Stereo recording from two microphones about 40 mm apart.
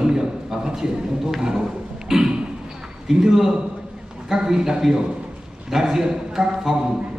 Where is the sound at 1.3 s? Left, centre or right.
Centre.